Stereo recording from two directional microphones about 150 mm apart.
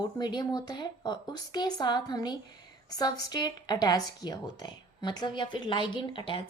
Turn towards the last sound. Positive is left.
turn(degrees=35)  # may be behind; listen again after turning